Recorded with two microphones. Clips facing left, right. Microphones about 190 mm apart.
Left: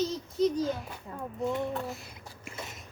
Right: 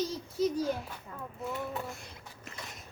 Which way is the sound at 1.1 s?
25° left (ahead or behind).